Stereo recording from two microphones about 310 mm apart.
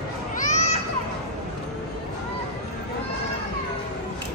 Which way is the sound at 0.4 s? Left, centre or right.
Left.